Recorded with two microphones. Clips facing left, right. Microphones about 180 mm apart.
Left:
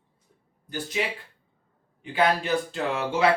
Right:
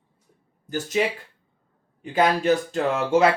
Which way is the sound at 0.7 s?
45° right (ahead or behind).